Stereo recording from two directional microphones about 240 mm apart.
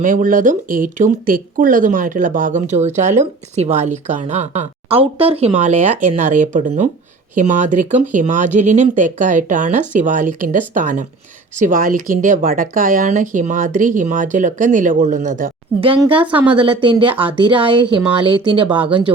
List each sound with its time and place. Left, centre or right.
0.0 s speech: right
16.2 s a woman's voice: centre
16.6 s speech: right